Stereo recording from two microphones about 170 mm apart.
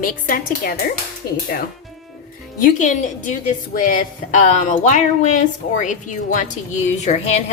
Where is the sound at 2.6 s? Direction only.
50° left (ahead or behind).